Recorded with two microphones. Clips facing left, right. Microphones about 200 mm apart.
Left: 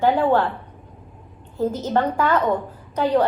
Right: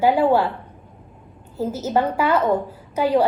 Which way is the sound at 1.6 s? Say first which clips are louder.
Even; 10° right (ahead or behind).